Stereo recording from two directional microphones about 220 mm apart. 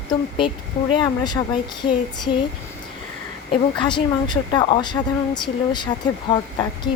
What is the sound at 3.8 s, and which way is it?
Speech, 20° left (ahead or behind).